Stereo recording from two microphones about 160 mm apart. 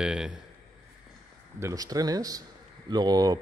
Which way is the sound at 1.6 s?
20° right (ahead or behind).